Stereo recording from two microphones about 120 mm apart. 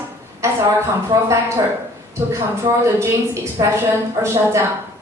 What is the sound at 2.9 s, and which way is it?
A woman's voice, 25° right (ahead or behind).